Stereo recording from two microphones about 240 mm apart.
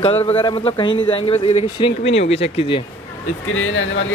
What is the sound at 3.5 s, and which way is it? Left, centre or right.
Speech, left.